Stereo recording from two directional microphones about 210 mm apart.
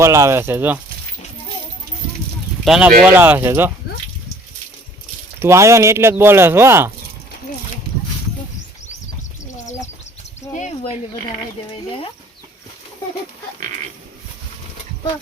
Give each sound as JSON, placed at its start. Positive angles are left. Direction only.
{"t": 0.0, "sound": "speech", "side_deg": -15}
{"t": 2.6, "sound": "speech", "side_deg": -5}
{"t": 5.4, "sound": "speech", "side_deg": -15}
{"t": 10.5, "sound": "a sound", "side_deg": 35}